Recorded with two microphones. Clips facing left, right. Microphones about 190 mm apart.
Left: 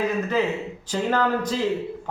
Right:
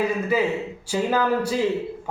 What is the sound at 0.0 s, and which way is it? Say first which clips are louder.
A man's voice: right 1 dB; 10° right (ahead or behind).